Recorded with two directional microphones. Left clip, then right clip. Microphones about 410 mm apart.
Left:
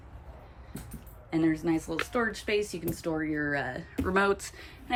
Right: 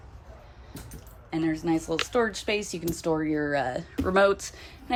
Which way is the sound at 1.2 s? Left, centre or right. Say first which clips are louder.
Even; centre.